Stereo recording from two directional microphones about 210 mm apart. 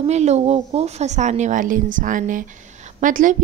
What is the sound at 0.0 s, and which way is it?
A woman's voice, 30° right (ahead or behind).